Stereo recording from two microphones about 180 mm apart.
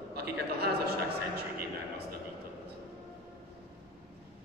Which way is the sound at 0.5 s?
65° right (ahead or behind).